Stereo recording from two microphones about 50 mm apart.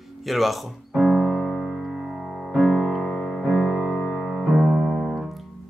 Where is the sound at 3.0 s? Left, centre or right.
Centre.